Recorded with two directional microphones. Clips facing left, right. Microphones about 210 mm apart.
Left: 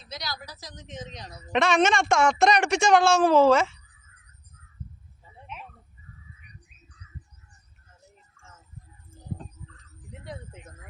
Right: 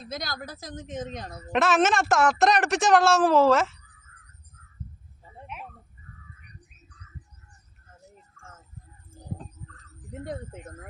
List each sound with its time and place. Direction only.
0.0 s a woman's voice: 50° right (ahead or behind)
1.5 s a woman's voice: 5° right (ahead or behind)
10.1 s a sound: 45° right (ahead or behind)